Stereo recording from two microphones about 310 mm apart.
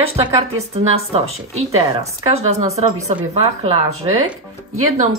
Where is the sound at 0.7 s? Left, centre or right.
Centre.